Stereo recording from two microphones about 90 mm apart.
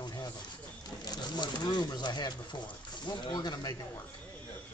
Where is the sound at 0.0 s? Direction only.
50° left (ahead or behind).